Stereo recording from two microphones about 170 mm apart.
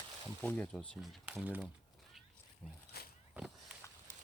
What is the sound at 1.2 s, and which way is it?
Speech, 5° right (ahead or behind).